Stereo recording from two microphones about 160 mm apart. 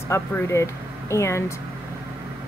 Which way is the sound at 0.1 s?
20° left (ahead or behind).